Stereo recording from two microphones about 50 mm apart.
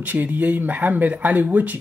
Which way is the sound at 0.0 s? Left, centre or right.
Right.